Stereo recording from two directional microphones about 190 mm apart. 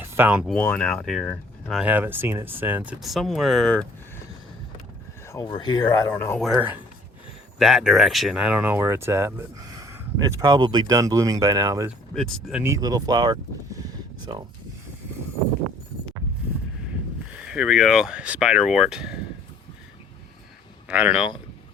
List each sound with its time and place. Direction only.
0.0 s speech: 10° right (ahead or behind)
0.5 s speech: 5° left (ahead or behind)
1.8 s speech: 10° right (ahead or behind)
5.3 s speech: 20° left (ahead or behind)
6.4 s speech: 5° right (ahead or behind)
12.1 s speech: centre (ahead or behind)
12.6 s speech: 20° right (ahead or behind)
17.3 s speech: 5° right (ahead or behind)
20.8 s speech: 5° right (ahead or behind)
21.2 s speech: 25° left (ahead or behind)